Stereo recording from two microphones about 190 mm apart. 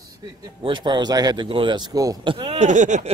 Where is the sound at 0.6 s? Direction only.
25° right (ahead or behind).